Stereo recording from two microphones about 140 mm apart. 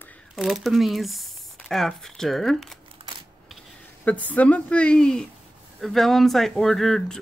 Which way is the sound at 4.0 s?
10° left (ahead or behind).